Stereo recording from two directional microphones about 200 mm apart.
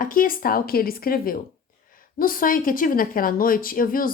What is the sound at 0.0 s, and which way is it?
Speech, 45° left (ahead or behind).